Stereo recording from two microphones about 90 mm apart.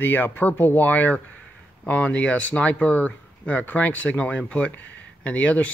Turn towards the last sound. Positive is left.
turn(degrees=15)  # may be behind; listen again after turning